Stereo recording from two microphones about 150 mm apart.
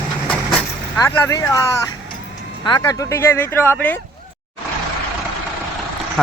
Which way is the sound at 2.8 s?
20° left (ahead or behind).